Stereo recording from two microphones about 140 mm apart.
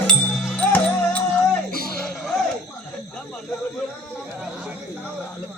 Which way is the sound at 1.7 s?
90° left.